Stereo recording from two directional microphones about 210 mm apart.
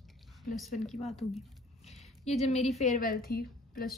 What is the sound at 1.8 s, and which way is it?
A woman's voice, 30° left (ahead or behind).